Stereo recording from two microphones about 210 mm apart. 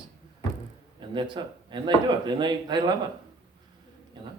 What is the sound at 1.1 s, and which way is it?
A man's voice, 20° right (ahead or behind).